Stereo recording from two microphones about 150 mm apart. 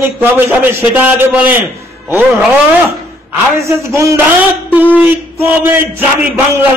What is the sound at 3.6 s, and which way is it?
A man's voice, 20° right (ahead or behind).